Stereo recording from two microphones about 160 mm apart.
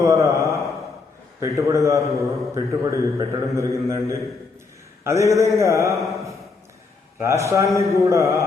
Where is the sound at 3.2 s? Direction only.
20° right (ahead or behind).